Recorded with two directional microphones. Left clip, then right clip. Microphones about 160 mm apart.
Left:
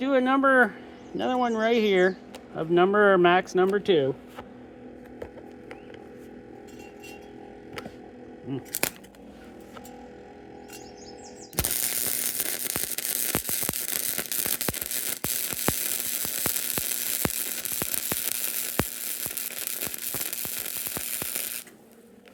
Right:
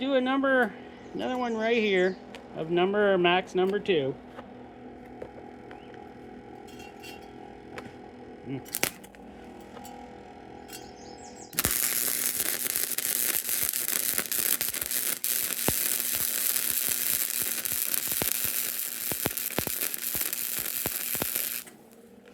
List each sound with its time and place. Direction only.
0.0 s speech: 50° left (ahead or behind)
8.8 s scissors: 15° left (ahead or behind)
11.5 s mechanisms: 5° left (ahead or behind)